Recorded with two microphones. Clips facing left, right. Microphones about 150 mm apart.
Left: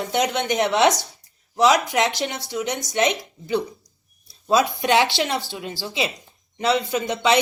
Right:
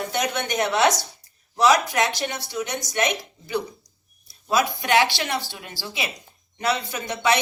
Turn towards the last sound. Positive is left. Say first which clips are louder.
# left 3 dB
turn(degrees=20)  # may be behind; listen again after turning